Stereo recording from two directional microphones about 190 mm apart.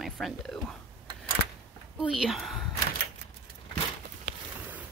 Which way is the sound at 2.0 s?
Centre (ahead or behind).